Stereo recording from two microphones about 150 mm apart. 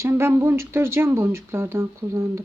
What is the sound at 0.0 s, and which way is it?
Speech, 15° right (ahead or behind).